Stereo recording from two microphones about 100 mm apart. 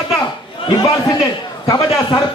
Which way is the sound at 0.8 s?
40° left (ahead or behind).